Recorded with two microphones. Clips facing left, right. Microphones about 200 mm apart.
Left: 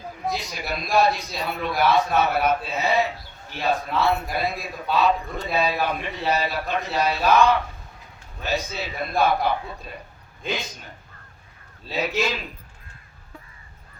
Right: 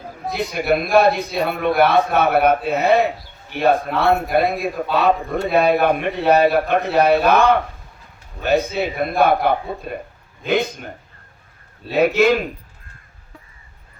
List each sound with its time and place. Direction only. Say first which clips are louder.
0.3 s a man's voice: right 11 dB; 60° right (ahead or behind)